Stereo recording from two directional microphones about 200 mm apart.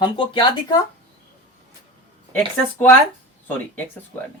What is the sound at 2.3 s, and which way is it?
Speech, 10° left (ahead or behind).